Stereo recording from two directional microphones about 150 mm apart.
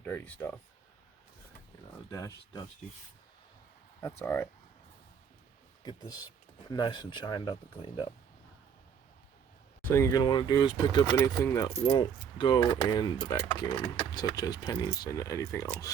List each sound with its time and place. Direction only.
0.0 s speech: 15° left (ahead or behind)
2.0 s speech: 20° left (ahead or behind)
4.2 s speech: 15° left (ahead or behind)
6.7 s speech: 30° left (ahead or behind)
9.9 s speech: 20° left (ahead or behind)
11.2 s speech: 15° left (ahead or behind)
12.4 s speech: 30° left (ahead or behind)